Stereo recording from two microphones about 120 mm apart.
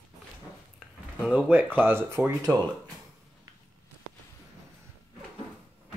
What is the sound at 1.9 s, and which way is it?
Speech, 20° right (ahead or behind).